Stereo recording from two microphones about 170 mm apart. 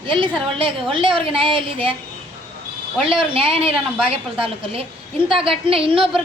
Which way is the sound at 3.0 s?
30° right (ahead or behind).